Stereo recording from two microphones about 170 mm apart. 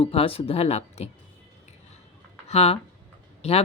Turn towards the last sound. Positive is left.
turn(degrees=35)  # may be behind; listen again after turning